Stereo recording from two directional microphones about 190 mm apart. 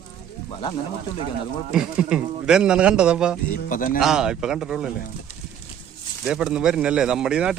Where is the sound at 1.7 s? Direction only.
5° right (ahead or behind).